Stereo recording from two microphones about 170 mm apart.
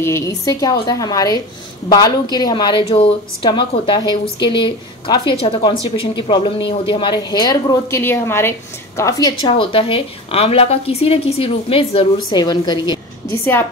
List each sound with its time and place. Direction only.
0.0 s a woman's voice: 15° left (ahead or behind)